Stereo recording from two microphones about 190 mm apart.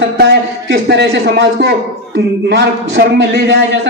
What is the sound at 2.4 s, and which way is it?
A man's voice, 60° right (ahead or behind).